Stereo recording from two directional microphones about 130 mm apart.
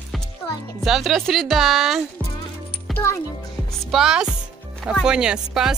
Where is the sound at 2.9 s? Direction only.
20° left (ahead or behind).